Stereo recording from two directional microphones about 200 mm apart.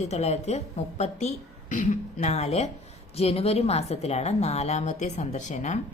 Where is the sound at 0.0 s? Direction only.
35° left (ahead or behind).